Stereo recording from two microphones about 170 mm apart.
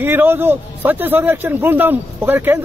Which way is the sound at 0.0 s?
10° right (ahead or behind).